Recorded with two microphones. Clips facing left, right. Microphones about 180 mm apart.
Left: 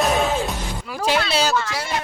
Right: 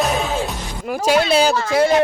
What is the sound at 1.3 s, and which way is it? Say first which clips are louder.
Speech: right 6 dB; 50° right (ahead or behind).